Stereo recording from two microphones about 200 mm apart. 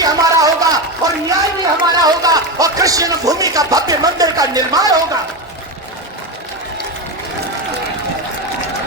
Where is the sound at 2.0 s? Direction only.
20° right (ahead or behind).